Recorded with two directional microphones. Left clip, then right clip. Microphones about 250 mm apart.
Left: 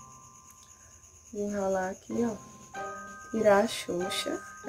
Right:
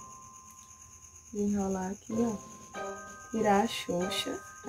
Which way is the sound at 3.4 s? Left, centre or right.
Centre.